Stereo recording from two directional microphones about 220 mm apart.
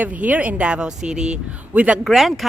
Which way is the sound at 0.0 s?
5° right (ahead or behind).